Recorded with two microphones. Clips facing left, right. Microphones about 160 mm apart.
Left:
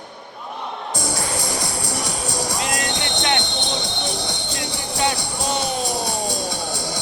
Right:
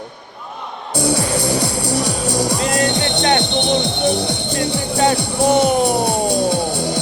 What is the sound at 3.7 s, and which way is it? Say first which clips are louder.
Music: right 10 dB; 60° right (ahead or behind).